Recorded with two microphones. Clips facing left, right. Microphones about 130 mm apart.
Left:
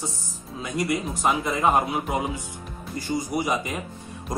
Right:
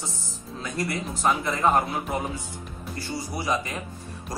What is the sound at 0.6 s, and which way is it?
A man's voice, 15° left (ahead or behind).